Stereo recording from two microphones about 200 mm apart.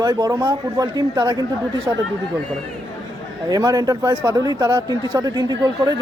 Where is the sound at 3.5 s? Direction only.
20° right (ahead or behind).